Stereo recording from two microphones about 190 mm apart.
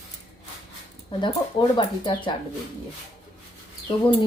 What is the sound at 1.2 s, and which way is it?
Speech, 25° left (ahead or behind).